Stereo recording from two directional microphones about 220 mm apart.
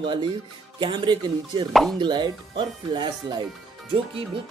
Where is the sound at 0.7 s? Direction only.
20° right (ahead or behind).